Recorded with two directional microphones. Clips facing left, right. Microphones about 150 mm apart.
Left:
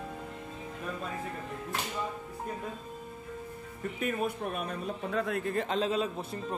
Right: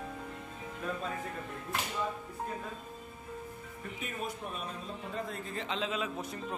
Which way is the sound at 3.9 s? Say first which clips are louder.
Left 8 dB; 55° left (ahead or behind).